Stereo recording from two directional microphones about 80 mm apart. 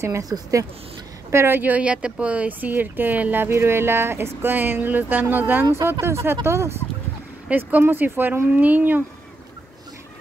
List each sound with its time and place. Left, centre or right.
0.0 s speech: right
1.3 s speech: right
5.8 s speech: right
7.4 s speech: right